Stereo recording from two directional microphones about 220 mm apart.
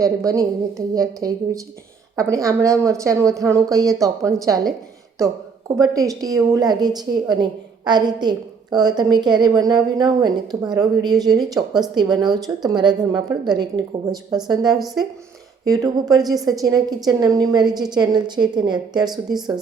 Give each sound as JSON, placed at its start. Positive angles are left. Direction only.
{"t": 0.0, "sound": "a woman's voice", "side_deg": -15}
{"t": 5.1, "sound": "a sound", "side_deg": -15}
{"t": 5.8, "sound": "a woman's voice", "side_deg": -15}
{"t": 12.1, "sound": "a woman's voice", "side_deg": -20}
{"t": 14.7, "sound": "speech", "side_deg": 0}
{"t": 15.8, "sound": "a woman's voice", "side_deg": -15}
{"t": 19.3, "sound": "speech", "side_deg": 0}